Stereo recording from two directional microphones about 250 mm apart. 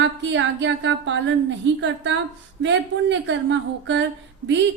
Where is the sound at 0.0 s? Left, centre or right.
Right.